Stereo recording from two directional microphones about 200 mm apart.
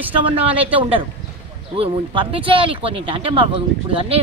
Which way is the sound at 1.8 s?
25° right (ahead or behind).